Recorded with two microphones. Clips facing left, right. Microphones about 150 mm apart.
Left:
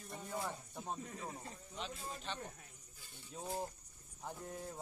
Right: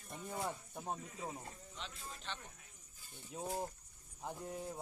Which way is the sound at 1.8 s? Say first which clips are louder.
Left 7 dB; 5° left (ahead or behind).